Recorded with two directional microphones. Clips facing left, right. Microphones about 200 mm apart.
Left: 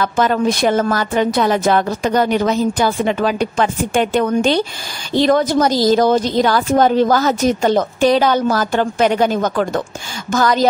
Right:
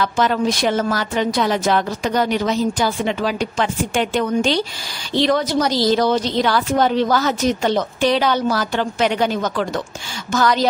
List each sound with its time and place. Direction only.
0.0 s a woman's voice: 50° left (ahead or behind)